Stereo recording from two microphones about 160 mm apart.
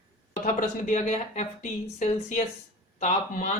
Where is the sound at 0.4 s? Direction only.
50° left (ahead or behind).